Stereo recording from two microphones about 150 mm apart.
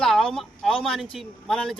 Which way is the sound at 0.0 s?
Centre (ahead or behind).